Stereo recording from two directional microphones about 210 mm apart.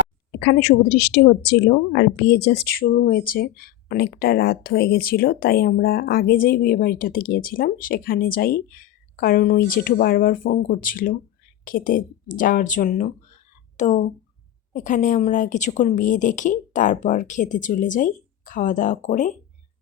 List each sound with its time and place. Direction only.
0.3 s a woman's voice: 50° left (ahead or behind); by 19.3 s 35° left (ahead or behind)